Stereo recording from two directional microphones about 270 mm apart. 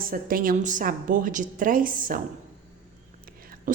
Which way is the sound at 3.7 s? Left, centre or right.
Right.